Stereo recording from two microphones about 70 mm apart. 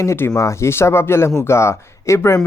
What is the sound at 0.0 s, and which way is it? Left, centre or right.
Speech, left.